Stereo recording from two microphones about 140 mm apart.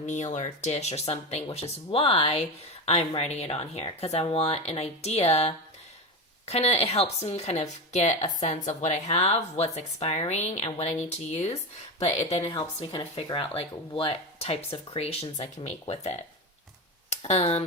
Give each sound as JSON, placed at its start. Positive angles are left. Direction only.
{"t": 0.0, "sound": "a woman's voice", "side_deg": 60}
{"t": 17.1, "sound": "speech", "side_deg": 50}